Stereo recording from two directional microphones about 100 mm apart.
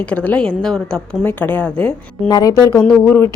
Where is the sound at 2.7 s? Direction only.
5° left (ahead or behind).